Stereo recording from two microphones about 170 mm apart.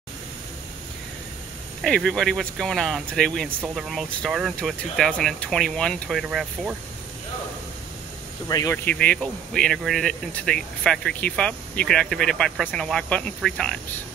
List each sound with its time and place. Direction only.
1.8 s speech: centre (ahead or behind)
8.5 s speech: 20° left (ahead or behind)
8.7 s speech: 10° left (ahead or behind)